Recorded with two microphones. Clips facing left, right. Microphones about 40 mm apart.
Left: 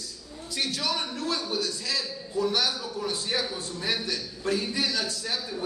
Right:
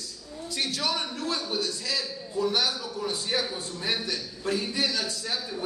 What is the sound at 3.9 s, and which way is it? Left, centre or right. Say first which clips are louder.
Speech: even; right.